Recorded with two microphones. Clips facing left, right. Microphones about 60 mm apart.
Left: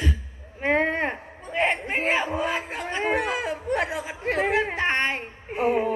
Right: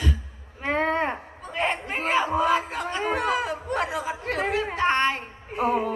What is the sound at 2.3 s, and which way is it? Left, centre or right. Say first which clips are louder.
Chatter: right 4 dB; left.